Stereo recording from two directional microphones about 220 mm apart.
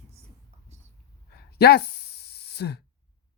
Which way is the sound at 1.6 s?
45° left (ahead or behind).